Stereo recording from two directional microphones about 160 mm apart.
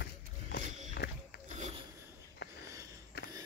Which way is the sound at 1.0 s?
90° left.